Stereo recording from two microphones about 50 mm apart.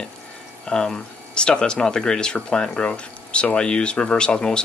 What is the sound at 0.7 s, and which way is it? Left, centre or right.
Speech, centre.